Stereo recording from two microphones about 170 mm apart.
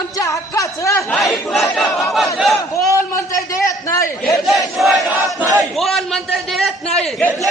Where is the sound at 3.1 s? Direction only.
15° left (ahead or behind).